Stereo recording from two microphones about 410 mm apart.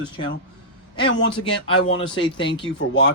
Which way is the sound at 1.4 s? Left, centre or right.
Centre.